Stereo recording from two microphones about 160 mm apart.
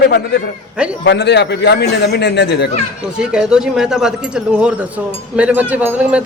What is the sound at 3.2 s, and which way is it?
A man's voice, 5° right (ahead or behind).